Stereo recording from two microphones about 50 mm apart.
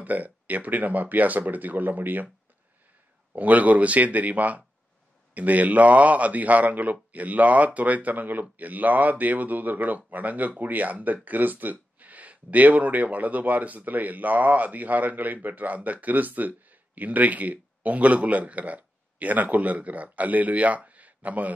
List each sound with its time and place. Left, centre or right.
0.0 s speech: right
3.3 s speech: right